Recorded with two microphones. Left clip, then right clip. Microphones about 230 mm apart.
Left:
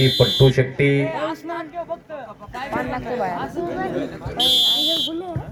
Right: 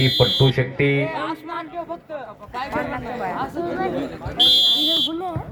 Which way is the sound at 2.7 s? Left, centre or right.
Left.